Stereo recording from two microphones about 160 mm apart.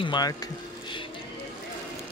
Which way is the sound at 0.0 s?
25° left (ahead or behind).